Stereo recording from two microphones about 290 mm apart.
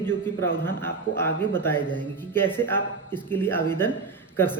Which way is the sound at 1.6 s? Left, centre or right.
Centre.